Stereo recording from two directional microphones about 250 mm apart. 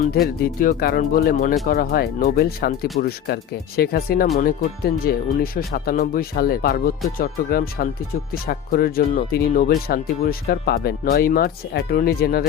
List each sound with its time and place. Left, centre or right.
0.4 s speech: left